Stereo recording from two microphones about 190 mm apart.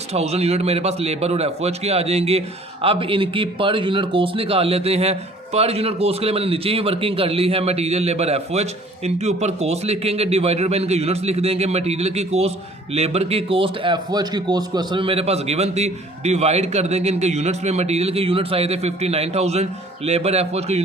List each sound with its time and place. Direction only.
0.1 s a man's voice: 35° right (ahead or behind)